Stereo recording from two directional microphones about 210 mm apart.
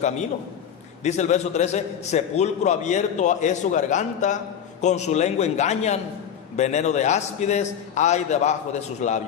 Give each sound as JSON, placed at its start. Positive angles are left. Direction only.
{"t": 1.0, "sound": "a man's voice", "side_deg": 35}